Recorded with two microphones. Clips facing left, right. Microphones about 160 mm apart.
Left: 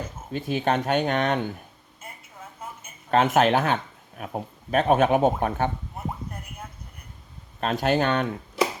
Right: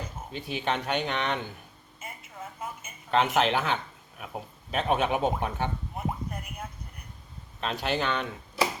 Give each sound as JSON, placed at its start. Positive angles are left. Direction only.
{"t": 0.3, "sound": "speech", "side_deg": 45}
{"t": 3.1, "sound": "speech", "side_deg": 50}
{"t": 7.6, "sound": "speech", "side_deg": 45}